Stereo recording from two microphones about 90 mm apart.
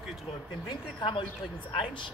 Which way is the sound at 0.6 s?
60° left (ahead or behind).